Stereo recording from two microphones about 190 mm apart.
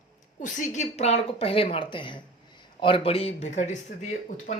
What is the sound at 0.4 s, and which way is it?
A woman's voice, 40° left (ahead or behind).